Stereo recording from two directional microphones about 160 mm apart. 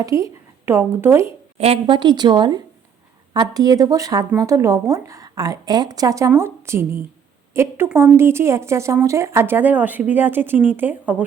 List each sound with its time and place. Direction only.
0.0 s speech: 20° right (ahead or behind)
1.5 s a woman's voice: 40° right (ahead or behind); by 11.2 s 10° right (ahead or behind)